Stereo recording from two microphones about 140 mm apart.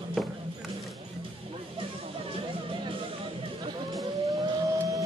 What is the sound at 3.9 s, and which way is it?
Music, 25° right (ahead or behind).